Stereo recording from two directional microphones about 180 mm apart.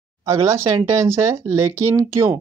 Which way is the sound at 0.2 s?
20° right (ahead or behind).